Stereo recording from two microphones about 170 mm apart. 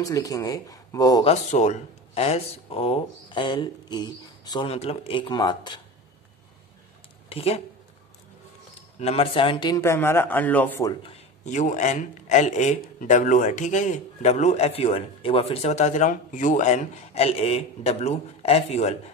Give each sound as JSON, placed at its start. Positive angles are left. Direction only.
{"t": 0.0, "sound": "speech", "side_deg": 20}
{"t": 1.2, "sound": "speech", "side_deg": 40}
{"t": 7.2, "sound": "speech", "side_deg": 35}
{"t": 9.0, "sound": "a man's voice", "side_deg": 35}
{"t": 10.9, "sound": "a man's voice", "side_deg": 35}